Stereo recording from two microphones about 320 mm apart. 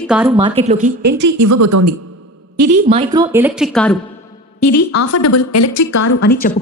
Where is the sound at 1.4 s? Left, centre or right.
Right.